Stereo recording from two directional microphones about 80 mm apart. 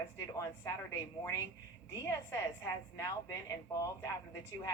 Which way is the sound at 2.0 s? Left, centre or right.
Left.